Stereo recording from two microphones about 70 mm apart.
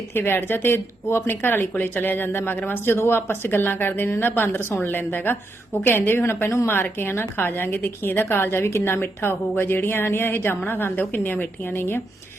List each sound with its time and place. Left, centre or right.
0.1 s a woman's voice: left